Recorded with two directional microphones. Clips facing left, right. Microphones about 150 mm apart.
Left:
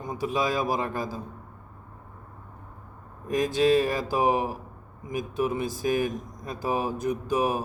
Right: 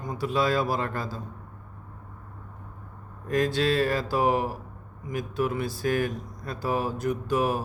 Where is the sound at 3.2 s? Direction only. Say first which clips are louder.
Left 2 dB; 15° left (ahead or behind).